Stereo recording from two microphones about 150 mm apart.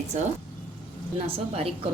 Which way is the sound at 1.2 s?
40° right (ahead or behind).